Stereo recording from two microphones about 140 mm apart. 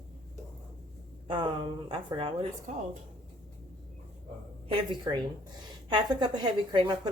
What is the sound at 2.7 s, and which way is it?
Speech, 55° right (ahead or behind).